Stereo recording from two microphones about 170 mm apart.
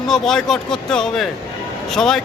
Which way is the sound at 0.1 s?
5° left (ahead or behind).